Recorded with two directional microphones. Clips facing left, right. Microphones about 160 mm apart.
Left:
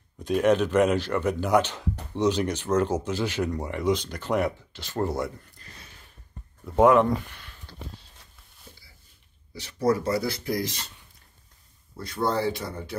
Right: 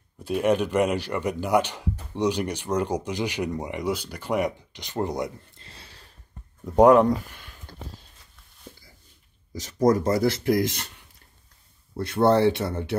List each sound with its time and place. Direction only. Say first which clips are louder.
0.2 s speech: left 1 dB; 10° right (ahead or behind); by 5.9 s 30° right (ahead or behind)
7.3 s a sound: right 2 dB; 45° right (ahead or behind)
9.5 s speech: right 4 dB; 40° right (ahead or behind)
12.0 s speech: right 7 dB; 65° right (ahead or behind)